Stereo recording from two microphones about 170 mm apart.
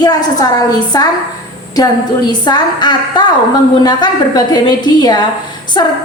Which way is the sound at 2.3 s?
25° left (ahead or behind).